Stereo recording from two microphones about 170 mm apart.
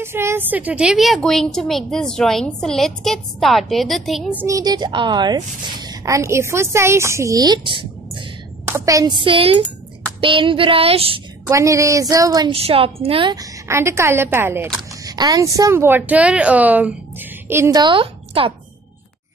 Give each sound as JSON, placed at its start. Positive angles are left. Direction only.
{"t": 0.0, "sound": "a woman's voice", "side_deg": -15}
{"t": 4.6, "sound": "a woman's voice", "side_deg": -25}
{"t": 8.6, "sound": "a woman's voice", "side_deg": -15}
{"t": 9.2, "sound": "speech", "side_deg": -30}
{"t": 11.4, "sound": "a woman's voice", "side_deg": -20}
{"t": 12.6, "sound": "a woman's voice", "side_deg": -35}